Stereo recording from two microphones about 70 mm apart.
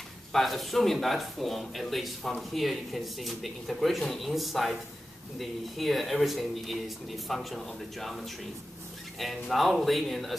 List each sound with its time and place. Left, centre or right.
0.3 s speech: centre
9.2 s speech: centre